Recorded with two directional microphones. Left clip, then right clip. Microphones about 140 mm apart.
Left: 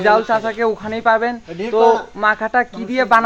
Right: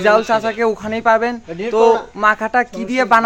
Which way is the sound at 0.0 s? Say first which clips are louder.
Right 1 dB; 20° right (ahead or behind).